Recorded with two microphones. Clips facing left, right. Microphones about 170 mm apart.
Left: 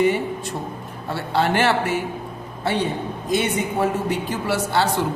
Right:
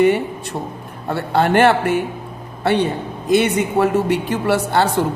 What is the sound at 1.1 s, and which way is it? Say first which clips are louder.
Speech: right 5 dB; 55° right (ahead or behind).